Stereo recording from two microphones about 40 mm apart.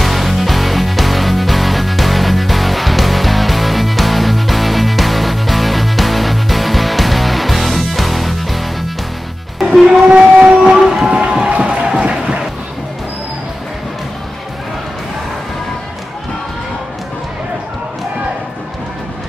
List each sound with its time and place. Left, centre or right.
0.0 s music: centre
9.6 s music: centre
10.5 s train: centre
11.3 s music: right